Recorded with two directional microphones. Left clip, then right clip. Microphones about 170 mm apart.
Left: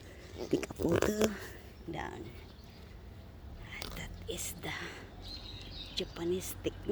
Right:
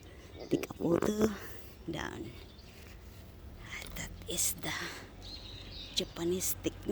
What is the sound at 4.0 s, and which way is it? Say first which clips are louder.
Speech: right 4 dB; 50° right (ahead or behind).